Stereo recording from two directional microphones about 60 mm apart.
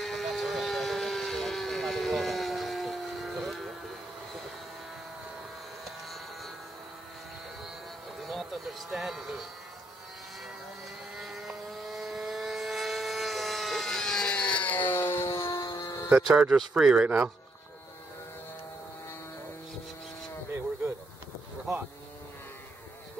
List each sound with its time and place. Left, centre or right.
0.0 s vehicle: centre
5.9 s a sound: centre
8.2 s a sound: centre
11.1 s vehicle: centre; by 14.8 s left
15.0 s music: left
16.3 s speech: centre
17.0 s speech: right